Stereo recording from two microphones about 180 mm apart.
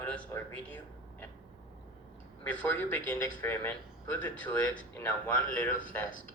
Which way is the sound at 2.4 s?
10° left (ahead or behind).